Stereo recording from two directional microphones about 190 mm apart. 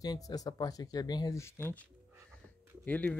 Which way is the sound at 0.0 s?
20° left (ahead or behind).